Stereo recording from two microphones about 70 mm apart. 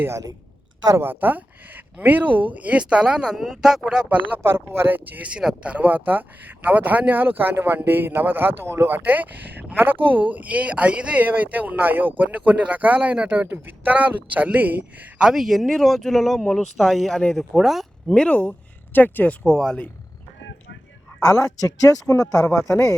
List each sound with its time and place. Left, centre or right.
0.1 s a woman's voice: right
0.9 s speech: right; by 4.0 s centre
4.4 s speech: right
9.0 s speech: right
15.2 s speech: centre
18.1 s speech: centre
19.5 s speech: centre
21.2 s speech: centre
22.0 s speech: left
22.5 s speech: centre